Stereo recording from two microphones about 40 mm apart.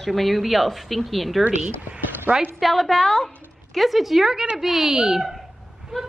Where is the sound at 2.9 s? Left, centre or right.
Centre.